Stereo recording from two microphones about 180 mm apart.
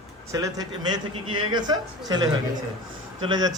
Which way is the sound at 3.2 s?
25° right (ahead or behind).